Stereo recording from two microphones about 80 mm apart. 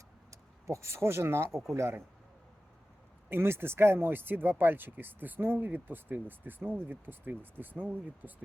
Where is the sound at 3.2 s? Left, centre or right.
Right.